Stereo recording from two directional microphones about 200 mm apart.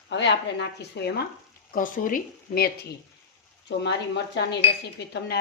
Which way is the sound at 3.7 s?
60° left (ahead or behind).